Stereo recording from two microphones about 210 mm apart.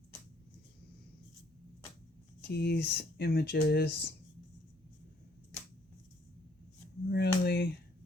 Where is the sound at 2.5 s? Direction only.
50° left (ahead or behind).